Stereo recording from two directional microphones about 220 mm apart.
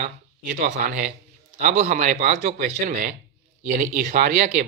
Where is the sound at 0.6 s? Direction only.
35° right (ahead or behind).